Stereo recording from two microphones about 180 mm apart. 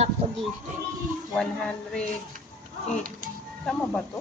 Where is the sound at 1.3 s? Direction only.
5° left (ahead or behind).